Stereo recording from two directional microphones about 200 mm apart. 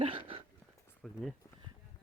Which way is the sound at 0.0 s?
25° right (ahead or behind).